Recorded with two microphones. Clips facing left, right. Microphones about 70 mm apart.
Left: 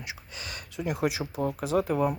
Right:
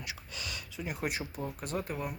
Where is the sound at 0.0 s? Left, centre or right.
Left.